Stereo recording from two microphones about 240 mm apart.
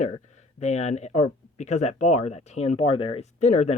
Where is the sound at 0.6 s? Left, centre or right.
Left.